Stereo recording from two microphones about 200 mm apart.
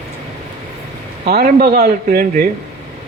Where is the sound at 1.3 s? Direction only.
50° right (ahead or behind).